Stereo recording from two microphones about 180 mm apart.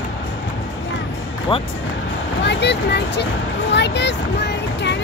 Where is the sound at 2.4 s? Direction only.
70° left (ahead or behind).